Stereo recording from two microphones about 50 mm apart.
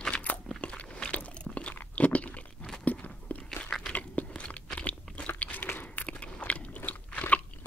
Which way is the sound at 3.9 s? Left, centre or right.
Left.